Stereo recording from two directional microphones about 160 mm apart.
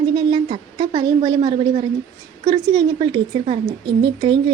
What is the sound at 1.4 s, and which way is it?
Speech, 40° right (ahead or behind).